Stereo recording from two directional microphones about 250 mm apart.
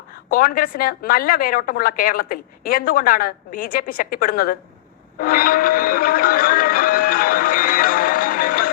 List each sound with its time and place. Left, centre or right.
0.3 s a woman's voice: left
5.2 s music: left